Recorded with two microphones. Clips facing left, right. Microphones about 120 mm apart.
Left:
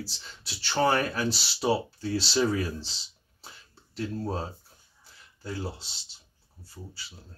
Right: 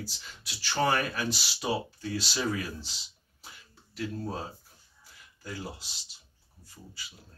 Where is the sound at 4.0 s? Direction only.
30° left (ahead or behind).